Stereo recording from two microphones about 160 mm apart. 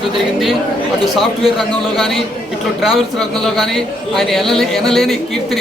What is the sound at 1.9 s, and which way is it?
A man's voice, centre (ahead or behind).